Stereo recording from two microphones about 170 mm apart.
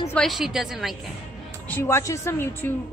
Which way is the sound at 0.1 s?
Centre (ahead or behind).